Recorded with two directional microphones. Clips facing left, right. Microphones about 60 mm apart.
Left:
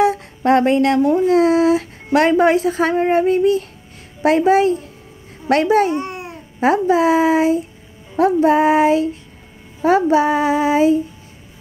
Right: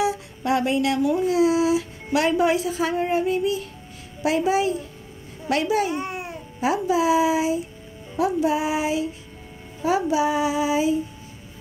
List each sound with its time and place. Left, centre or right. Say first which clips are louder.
0.0 s speech: left 8 dB; left
2.1 s music: left 7 dB; left
5.9 s babbling: left 4 dB; centre
6.6 s music: left 7 dB; left